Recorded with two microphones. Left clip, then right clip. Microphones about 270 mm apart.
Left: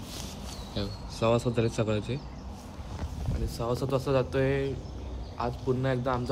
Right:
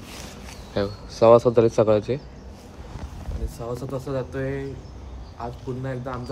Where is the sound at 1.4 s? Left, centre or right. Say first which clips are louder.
Right 12 dB; right.